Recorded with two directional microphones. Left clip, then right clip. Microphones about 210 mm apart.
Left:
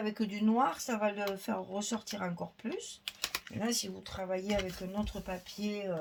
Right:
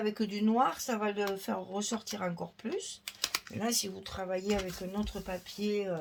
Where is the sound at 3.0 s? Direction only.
10° right (ahead or behind).